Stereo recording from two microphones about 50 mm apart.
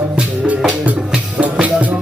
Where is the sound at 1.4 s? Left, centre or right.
Right.